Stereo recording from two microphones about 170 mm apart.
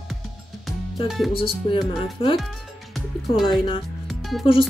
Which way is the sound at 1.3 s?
30° left (ahead or behind).